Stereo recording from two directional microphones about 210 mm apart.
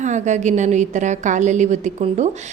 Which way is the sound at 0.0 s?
35° right (ahead or behind).